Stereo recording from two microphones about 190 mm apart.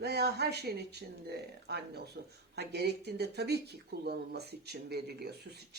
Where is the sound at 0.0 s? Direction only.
60° right (ahead or behind).